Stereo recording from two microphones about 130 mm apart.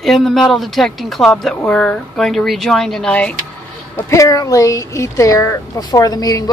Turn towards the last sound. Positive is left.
turn(degrees=30)  # may be behind; listen again after turning